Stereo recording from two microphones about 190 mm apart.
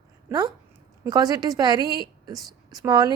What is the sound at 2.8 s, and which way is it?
Speech, 20° right (ahead or behind).